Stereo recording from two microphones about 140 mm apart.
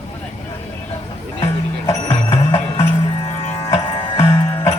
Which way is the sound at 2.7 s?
45° left (ahead or behind).